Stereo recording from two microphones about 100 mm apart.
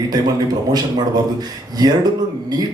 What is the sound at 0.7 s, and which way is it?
A man's voice, 45° right (ahead or behind).